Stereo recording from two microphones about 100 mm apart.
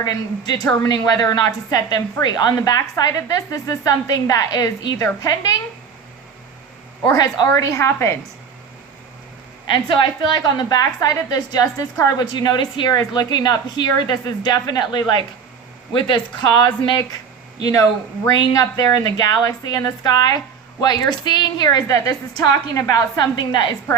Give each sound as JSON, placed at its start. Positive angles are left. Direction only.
{"t": 0.0, "sound": "a woman's voice", "side_deg": 40}
{"t": 7.0, "sound": "a woman's voice", "side_deg": 40}
{"t": 7.4, "sound": "a woman's voice", "side_deg": 25}
{"t": 9.6, "sound": "a woman's voice", "side_deg": 55}
{"t": 17.6, "sound": "a woman's voice", "side_deg": 40}